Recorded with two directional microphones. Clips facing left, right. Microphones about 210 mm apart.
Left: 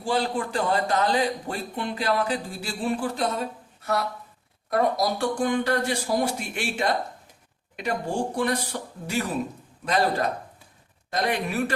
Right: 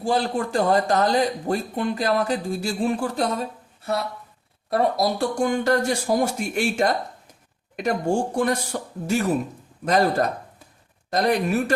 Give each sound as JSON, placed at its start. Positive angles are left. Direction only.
{"t": 0.0, "sound": "speech", "side_deg": -40}
{"t": 4.7, "sound": "speech", "side_deg": -40}